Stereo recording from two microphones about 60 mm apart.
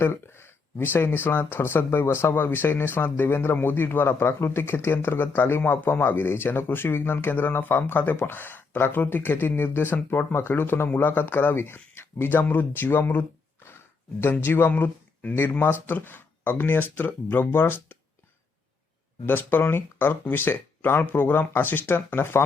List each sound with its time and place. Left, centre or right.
0.0 s speech: left
14.7 s speech: left
19.2 s speech: left